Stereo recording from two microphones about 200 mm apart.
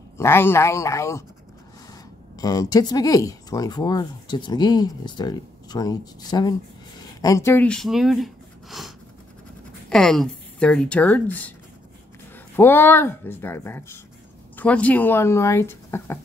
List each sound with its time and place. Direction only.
0.2 s speech: 10° left (ahead or behind)
2.3 s a woman's voice: 15° left (ahead or behind)
12.5 s speech: 10° left (ahead or behind)